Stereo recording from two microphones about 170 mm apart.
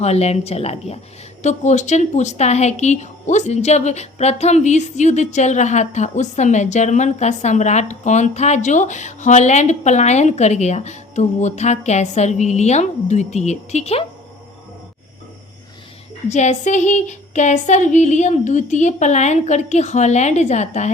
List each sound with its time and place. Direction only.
0.0 s a woman's voice: 40° left (ahead or behind)
16.3 s speech: 45° left (ahead or behind)